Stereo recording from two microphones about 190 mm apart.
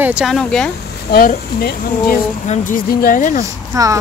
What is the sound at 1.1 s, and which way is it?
Speech, 50° left (ahead or behind).